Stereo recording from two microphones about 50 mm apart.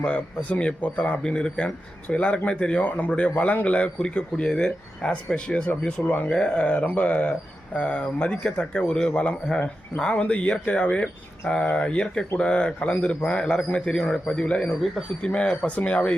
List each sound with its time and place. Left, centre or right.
0.4 s speech: left
1.2 s a man's voice: centre
14.3 s speech: left